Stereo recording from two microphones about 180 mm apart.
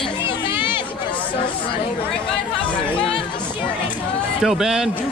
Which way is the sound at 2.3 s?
5° left (ahead or behind).